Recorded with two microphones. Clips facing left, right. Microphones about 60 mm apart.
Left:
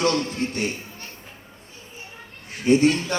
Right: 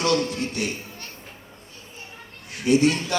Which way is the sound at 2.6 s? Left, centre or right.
Left.